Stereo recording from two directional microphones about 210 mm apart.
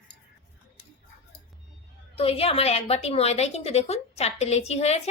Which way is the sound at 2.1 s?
25° left (ahead or behind).